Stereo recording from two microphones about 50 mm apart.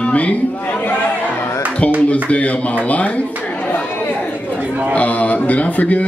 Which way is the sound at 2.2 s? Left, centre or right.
Left.